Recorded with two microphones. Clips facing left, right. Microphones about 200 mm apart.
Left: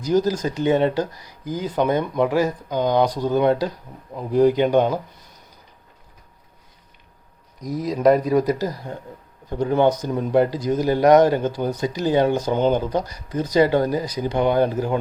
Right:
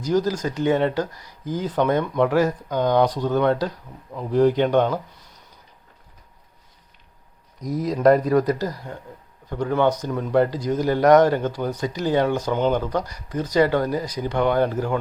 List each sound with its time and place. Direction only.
0.3 s speech: 20° left (ahead or behind)
1.6 s speech: 5° left (ahead or behind)
7.6 s speech: centre (ahead or behind)
8.4 s speech: 15° left (ahead or behind)